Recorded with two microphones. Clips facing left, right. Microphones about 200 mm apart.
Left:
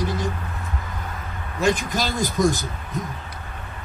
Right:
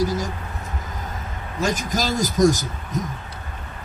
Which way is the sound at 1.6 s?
45° right (ahead or behind).